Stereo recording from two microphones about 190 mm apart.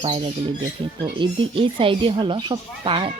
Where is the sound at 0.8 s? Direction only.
25° right (ahead or behind).